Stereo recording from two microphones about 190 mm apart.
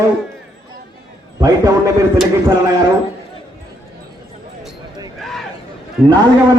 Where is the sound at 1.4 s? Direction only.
15° right (ahead or behind).